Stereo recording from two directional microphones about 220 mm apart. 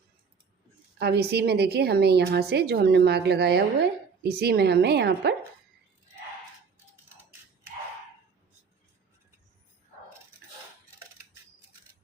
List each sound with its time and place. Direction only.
0.9 s a woman's voice: 50° right (ahead or behind)